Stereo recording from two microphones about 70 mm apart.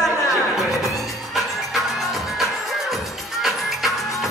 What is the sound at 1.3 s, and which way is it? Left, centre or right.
Music, centre.